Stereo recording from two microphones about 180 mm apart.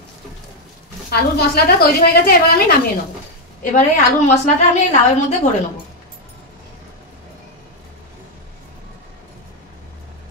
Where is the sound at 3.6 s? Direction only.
45° left (ahead or behind).